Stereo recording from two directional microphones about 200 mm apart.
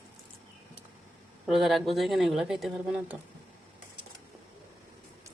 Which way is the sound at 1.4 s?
Centre (ahead or behind).